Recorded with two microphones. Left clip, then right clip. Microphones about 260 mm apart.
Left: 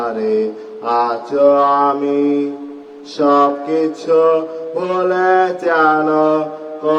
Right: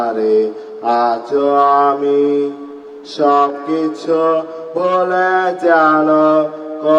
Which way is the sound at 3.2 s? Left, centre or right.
Right.